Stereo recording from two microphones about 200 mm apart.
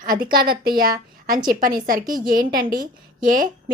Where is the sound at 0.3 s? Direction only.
45° right (ahead or behind).